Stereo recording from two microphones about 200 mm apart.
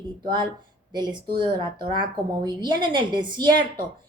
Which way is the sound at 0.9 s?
25° right (ahead or behind).